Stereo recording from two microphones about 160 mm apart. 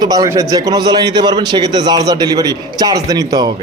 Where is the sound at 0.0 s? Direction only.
25° right (ahead or behind).